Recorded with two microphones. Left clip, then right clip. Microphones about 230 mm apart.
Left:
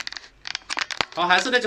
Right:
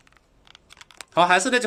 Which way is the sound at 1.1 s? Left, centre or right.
Right.